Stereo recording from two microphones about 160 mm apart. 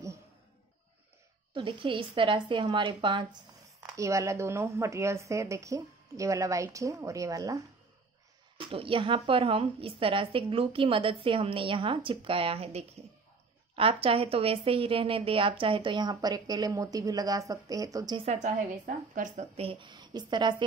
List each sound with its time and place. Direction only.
1.5 s a woman's voice: 30° right (ahead or behind)
3.8 s speech: 20° right (ahead or behind)
8.5 s a woman's voice: 35° right (ahead or behind)
18.2 s a woman's voice: 45° right (ahead or behind)
19.6 s speech: 35° right (ahead or behind)